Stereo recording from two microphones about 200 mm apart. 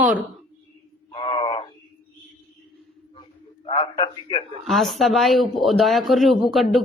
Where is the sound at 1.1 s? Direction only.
25° left (ahead or behind).